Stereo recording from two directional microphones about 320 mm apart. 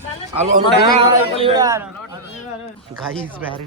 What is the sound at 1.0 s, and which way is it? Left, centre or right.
Speech, centre.